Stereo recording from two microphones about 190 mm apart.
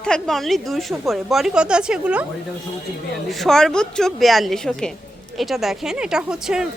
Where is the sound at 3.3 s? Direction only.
Centre (ahead or behind).